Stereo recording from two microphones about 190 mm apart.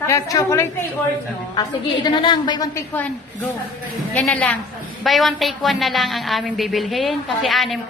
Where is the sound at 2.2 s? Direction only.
25° left (ahead or behind).